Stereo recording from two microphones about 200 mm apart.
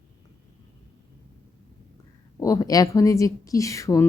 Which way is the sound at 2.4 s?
15° left (ahead or behind).